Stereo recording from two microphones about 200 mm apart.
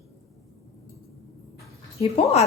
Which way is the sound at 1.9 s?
30° left (ahead or behind).